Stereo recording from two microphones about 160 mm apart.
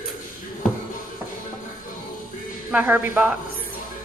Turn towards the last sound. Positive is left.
turn(degrees=-10)  # may be behind; listen again after turning